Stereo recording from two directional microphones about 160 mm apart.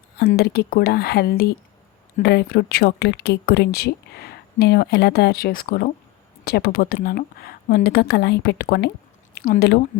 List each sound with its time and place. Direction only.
0.3 s speech: 85° left
9.3 s speech: 75° left (ahead or behind)